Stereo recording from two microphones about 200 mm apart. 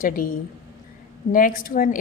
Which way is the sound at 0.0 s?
45° left (ahead or behind).